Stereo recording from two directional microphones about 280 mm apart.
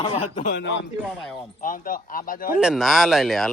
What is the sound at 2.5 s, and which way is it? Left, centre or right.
Speech, centre.